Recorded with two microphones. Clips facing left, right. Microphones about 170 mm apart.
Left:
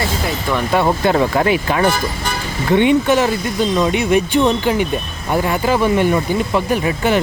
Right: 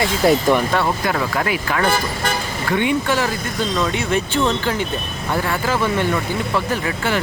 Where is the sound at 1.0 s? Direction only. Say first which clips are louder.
Left 6 dB; 25° left (ahead or behind).